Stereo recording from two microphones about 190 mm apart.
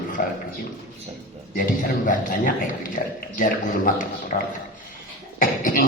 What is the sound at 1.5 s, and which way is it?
A man's voice, 50° left (ahead or behind).